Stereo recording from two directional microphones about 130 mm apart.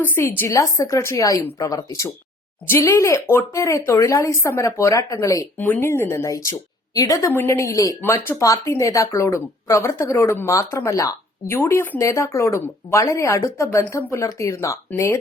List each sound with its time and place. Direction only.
0.0 s speech: 20° left (ahead or behind)